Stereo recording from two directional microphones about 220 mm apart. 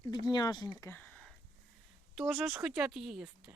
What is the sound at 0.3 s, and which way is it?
Speech, 20° left (ahead or behind).